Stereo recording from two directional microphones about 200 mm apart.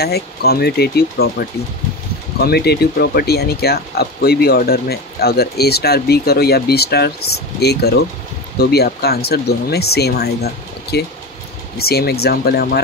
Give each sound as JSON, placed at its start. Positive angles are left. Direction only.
{"t": 0.0, "sound": "speech", "side_deg": 50}